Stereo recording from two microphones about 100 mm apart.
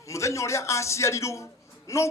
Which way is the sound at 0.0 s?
30° left (ahead or behind).